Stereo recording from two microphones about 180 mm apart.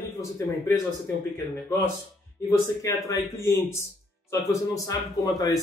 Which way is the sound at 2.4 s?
20° left (ahead or behind).